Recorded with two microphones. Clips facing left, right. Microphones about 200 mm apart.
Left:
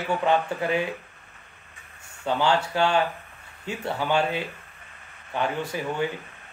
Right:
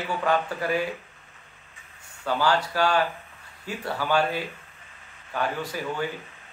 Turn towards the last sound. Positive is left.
turn(degrees=20)  # may be behind; listen again after turning